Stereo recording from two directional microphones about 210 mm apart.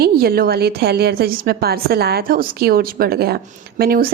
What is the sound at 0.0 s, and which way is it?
A woman's voice, 50° right (ahead or behind).